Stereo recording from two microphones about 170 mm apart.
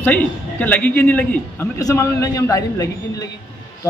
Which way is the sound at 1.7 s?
20° left (ahead or behind).